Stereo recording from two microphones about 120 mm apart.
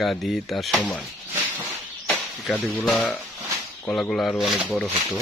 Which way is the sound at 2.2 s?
Centre (ahead or behind).